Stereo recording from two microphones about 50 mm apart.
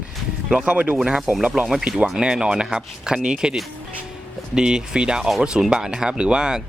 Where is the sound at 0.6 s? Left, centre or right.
Right.